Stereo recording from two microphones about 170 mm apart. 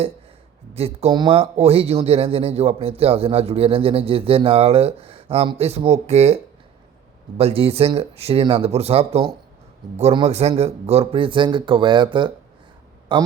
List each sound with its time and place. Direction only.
0.7 s a man's voice: 35° right (ahead or behind)